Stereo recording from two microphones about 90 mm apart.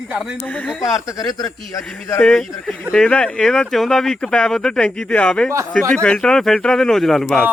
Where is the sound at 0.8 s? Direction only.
40° left (ahead or behind).